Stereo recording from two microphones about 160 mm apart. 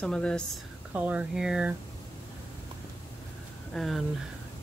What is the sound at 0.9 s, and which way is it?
Speech, 10° right (ahead or behind).